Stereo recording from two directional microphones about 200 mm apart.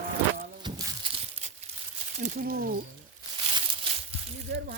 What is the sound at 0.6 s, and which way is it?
Crumpling, 20° right (ahead or behind).